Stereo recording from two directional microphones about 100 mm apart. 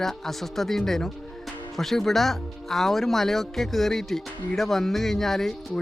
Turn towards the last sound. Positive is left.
turn(degrees=5)  # may be behind; listen again after turning